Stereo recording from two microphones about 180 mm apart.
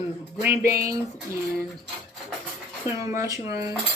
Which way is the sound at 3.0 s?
15° right (ahead or behind).